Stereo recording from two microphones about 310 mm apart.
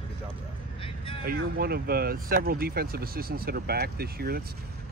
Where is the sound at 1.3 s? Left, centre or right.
Right.